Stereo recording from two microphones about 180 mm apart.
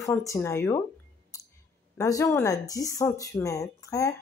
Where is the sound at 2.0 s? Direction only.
15° left (ahead or behind).